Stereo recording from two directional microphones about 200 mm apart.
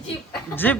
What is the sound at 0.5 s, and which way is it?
Speech, 10° left (ahead or behind).